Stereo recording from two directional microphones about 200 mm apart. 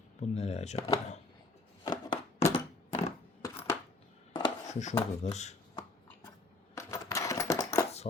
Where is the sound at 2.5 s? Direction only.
30° left (ahead or behind).